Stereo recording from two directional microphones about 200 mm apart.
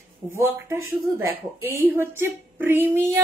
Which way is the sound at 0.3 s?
15° right (ahead or behind).